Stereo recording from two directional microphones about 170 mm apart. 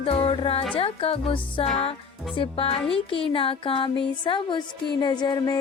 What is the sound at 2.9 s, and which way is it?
Music, 30° left (ahead or behind).